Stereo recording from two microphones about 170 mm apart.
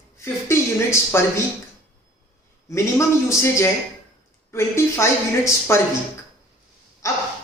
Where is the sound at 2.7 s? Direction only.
15° left (ahead or behind).